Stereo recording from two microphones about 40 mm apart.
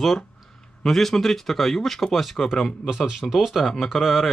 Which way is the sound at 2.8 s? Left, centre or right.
Centre.